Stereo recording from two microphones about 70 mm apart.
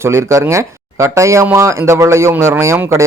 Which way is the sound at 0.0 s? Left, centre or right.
Right.